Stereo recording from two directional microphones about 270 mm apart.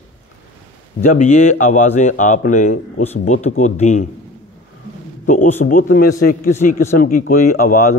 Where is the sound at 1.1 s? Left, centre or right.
Left.